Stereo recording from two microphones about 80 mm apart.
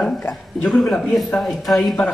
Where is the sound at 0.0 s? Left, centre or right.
Centre.